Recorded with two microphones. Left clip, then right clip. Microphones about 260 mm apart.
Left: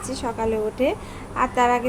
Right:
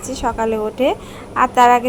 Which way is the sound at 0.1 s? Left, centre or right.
Centre.